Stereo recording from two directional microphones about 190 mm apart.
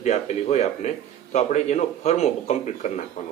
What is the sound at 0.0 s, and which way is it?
Speech, 35° left (ahead or behind).